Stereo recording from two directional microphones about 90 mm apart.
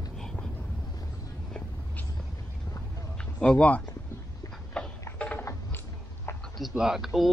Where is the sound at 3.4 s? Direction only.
10° left (ahead or behind).